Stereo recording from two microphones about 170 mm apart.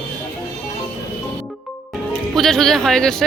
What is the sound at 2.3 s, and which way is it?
Speech, centre (ahead or behind).